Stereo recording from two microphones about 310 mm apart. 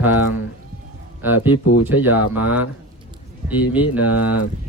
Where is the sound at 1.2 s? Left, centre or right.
Centre.